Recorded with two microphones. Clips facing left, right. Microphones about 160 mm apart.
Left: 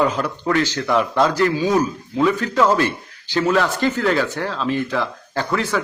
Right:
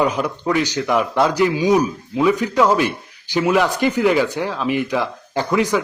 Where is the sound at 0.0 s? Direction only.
15° right (ahead or behind).